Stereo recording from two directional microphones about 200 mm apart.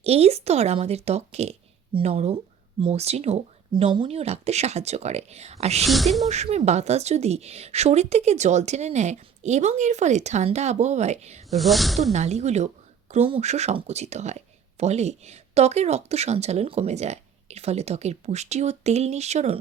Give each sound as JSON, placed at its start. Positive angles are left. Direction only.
{"t": 0.0, "sound": "speech", "side_deg": -30}
{"t": 5.8, "sound": "speech", "side_deg": 0}
{"t": 6.2, "sound": "speech", "side_deg": -35}
{"t": 11.5, "sound": "speech", "side_deg": 0}
{"t": 12.1, "sound": "speech", "side_deg": -35}